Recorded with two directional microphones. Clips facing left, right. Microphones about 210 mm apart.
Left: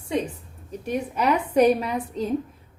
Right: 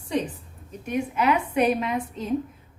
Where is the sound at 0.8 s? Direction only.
35° left (ahead or behind).